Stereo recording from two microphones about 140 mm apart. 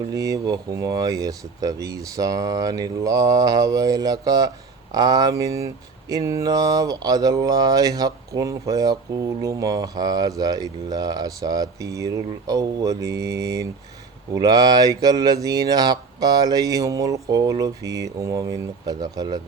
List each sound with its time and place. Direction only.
0.1 s speech: 25° right (ahead or behind)